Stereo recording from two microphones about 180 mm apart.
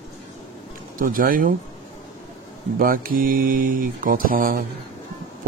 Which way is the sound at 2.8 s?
55° right (ahead or behind).